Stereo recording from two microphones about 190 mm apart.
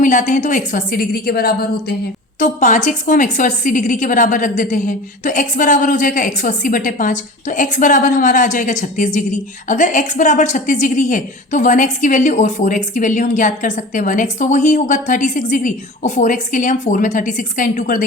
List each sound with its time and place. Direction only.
0.0 s a woman's voice: 40° left (ahead or behind)
2.4 s a woman's voice: 40° left (ahead or behind)